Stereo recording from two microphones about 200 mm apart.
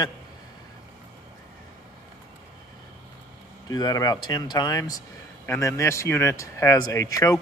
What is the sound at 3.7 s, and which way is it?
A man's voice, 20° left (ahead or behind).